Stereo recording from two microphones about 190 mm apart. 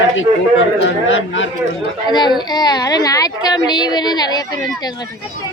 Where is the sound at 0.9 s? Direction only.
85° left.